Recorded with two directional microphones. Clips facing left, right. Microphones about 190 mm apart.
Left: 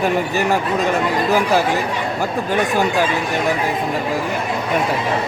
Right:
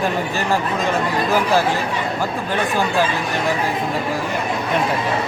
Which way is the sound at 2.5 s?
15° left (ahead or behind).